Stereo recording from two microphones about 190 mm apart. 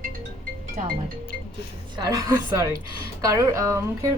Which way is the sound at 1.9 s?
20° right (ahead or behind).